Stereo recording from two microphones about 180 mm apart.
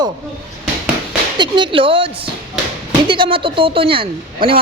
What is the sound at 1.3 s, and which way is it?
A woman's voice, 25° right (ahead or behind).